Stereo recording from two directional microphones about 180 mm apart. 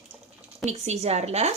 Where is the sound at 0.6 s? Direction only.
40° right (ahead or behind).